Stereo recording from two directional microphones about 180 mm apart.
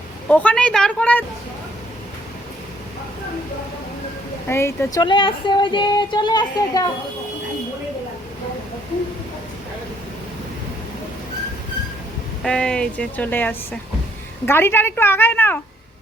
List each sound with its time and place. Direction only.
0.3 s speech: 5° left (ahead or behind)
4.4 s speech: 15° left (ahead or behind)
12.4 s speech: 5° left (ahead or behind)